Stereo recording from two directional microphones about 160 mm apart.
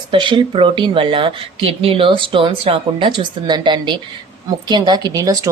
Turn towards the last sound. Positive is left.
turn(degrees=-20)  # may be behind; listen again after turning